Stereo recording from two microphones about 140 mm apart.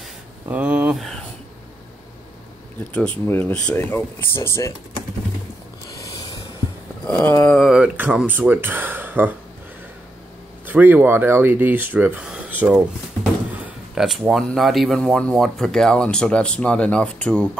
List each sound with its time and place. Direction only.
0.5 s speech: 10° right (ahead or behind)
2.9 s speech: 10° left (ahead or behind)
5.9 s mechanisms: 25° left (ahead or behind)
7.1 s speech: 5° left (ahead or behind)
7.6 s speech: 5° right (ahead or behind)
10.7 s speech: 10° right (ahead or behind); by 17.5 s 5° left (ahead or behind)